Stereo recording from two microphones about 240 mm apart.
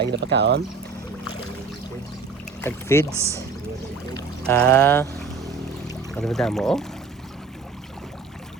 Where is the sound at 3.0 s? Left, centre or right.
Centre.